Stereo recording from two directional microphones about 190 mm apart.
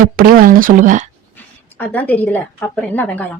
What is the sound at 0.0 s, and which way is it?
Speech, 50° right (ahead or behind).